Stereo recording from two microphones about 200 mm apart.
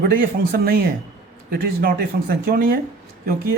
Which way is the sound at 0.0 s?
50° right (ahead or behind).